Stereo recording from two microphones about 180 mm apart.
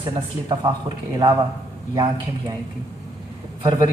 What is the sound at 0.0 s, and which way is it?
A man's voice, 25° right (ahead or behind).